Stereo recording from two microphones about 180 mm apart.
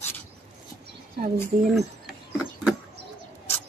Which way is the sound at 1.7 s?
Centre (ahead or behind).